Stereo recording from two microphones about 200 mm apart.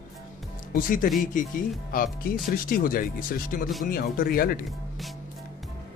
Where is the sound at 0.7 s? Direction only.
45° left (ahead or behind).